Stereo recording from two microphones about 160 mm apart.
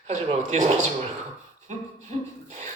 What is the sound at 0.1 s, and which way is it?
Speech, 45° right (ahead or behind).